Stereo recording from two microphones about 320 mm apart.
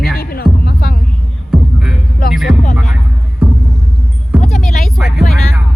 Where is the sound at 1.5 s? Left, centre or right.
Centre.